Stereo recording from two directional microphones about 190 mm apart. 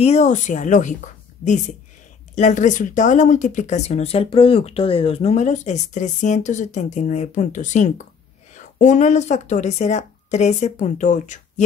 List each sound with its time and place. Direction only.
0.0 s speech: 35° left (ahead or behind)
2.3 s speech: 40° left (ahead or behind)